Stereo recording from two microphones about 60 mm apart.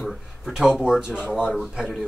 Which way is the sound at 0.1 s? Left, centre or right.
Centre.